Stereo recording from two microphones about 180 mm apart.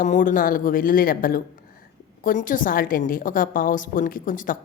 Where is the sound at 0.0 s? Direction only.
45° left (ahead or behind).